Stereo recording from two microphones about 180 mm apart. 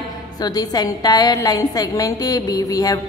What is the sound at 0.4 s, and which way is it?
A woman's voice, 20° left (ahead or behind).